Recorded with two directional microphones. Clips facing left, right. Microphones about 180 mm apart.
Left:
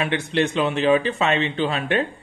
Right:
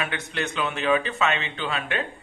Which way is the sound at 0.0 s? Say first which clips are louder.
Left 8 dB; 30° left (ahead or behind).